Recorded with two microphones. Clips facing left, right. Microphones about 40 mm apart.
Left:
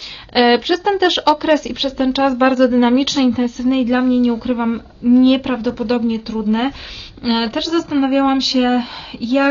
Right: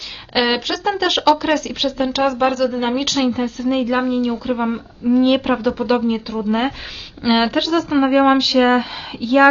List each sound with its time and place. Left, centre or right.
0.3 s speech: centre
2.4 s speech: left
2.8 s speech: centre